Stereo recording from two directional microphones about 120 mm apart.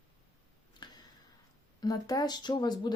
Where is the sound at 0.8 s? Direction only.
35° left (ahead or behind).